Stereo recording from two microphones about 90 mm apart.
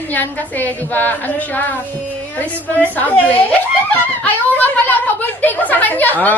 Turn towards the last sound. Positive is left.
turn(degrees=20)  # may be behind; listen again after turning